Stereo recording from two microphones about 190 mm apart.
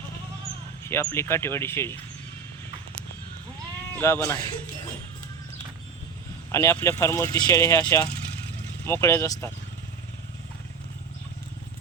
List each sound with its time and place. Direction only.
0.9 s speech: 15° left (ahead or behind)
3.9 s speech: 15° left (ahead or behind)
6.5 s speech: 15° left (ahead or behind)